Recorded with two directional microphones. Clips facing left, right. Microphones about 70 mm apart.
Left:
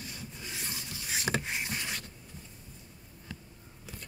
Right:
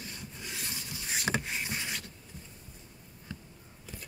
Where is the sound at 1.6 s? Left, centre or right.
Centre.